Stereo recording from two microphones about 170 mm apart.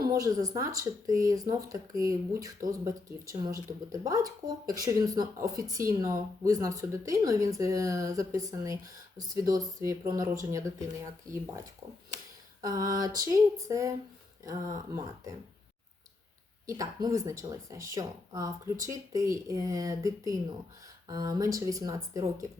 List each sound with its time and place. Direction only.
0.2 s speech: 20° right (ahead or behind)
11.3 s speech: 50° right (ahead or behind)
12.9 s speech: 20° right (ahead or behind)
14.9 s speech: 20° right (ahead or behind)
16.6 s speech: 20° right (ahead or behind)